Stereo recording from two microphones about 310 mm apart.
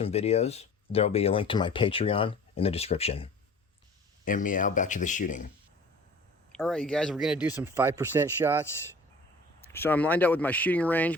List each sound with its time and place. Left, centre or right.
0.0 s speech: centre
4.3 s speech: left
6.5 s speech: centre
9.6 s speech: centre